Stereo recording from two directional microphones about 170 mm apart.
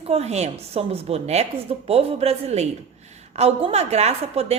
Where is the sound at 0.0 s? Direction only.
40° right (ahead or behind).